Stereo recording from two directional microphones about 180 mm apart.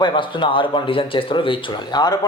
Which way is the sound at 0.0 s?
25° left (ahead or behind).